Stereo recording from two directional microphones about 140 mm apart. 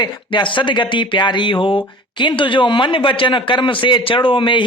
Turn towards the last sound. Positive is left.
turn(degrees=35)  # may be behind; listen again after turning